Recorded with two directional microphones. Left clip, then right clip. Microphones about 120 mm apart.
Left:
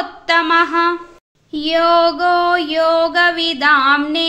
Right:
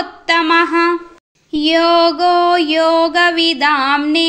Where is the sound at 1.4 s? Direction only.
30° right (ahead or behind).